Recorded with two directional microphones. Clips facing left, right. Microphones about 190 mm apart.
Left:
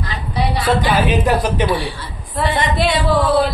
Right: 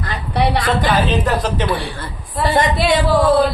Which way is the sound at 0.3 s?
65° right (ahead or behind).